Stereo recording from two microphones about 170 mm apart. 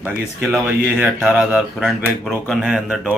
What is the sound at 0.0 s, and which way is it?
A man's voice, 10° right (ahead or behind).